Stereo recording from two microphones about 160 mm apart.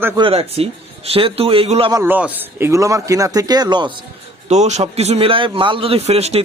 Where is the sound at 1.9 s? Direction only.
15° right (ahead or behind).